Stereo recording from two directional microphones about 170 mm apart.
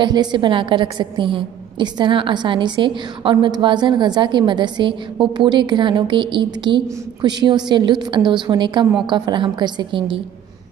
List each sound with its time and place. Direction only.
0.0 s a woman's voice: 25° right (ahead or behind)